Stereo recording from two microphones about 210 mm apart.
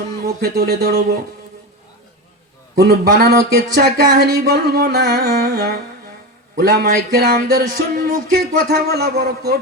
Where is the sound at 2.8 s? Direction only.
50° right (ahead or behind).